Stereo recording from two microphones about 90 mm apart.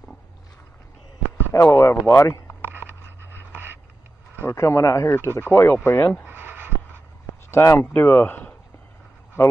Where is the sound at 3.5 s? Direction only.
25° right (ahead or behind).